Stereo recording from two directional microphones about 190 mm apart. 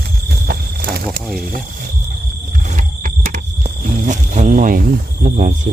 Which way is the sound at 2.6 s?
45° right (ahead or behind).